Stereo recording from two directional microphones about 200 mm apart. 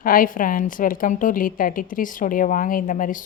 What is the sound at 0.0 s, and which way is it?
A woman's voice, 45° left (ahead or behind).